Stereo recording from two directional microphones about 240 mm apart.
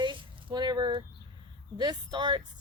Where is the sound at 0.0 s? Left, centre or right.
Centre.